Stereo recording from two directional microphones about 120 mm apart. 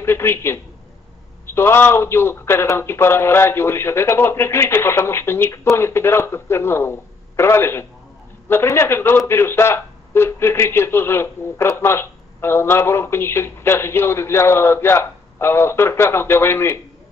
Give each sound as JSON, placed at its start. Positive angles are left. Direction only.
{"t": 0.0, "sound": "a man's voice", "side_deg": 20}